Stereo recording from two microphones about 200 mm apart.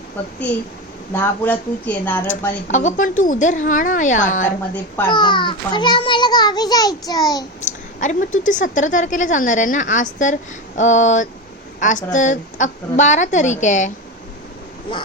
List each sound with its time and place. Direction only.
1.1 s speech: 10° left (ahead or behind)
2.6 s a woman's voice: 40° left (ahead or behind)
5.0 s a child's voice: 20° left (ahead or behind)
7.6 s a woman's voice: 40° left (ahead or behind)